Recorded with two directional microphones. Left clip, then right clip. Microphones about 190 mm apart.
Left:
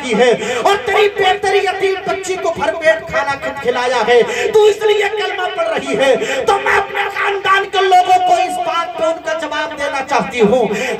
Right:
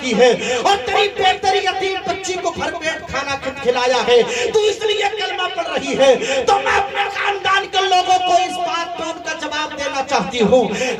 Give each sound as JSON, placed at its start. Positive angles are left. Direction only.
{"t": 0.1, "sound": "speech", "side_deg": 25}
{"t": 10.4, "sound": "speech", "side_deg": 20}